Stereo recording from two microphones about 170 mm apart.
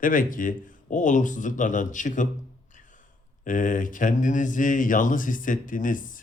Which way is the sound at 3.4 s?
50° left (ahead or behind).